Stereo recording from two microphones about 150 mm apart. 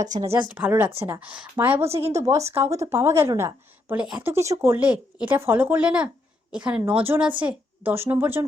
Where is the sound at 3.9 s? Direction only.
5° right (ahead or behind).